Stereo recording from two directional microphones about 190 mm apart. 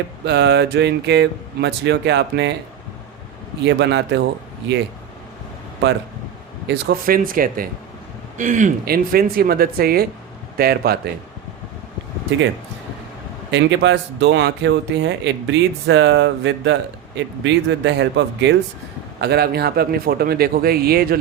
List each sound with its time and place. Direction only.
0.3 s speech: 60° right (ahead or behind)
3.6 s speech: 65° right (ahead or behind)
6.7 s speech: 55° right (ahead or behind)
13.5 s speech: 70° right (ahead or behind); by 21.2 s 55° right (ahead or behind)